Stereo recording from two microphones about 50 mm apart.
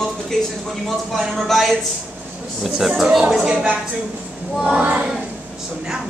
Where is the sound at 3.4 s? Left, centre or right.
Right.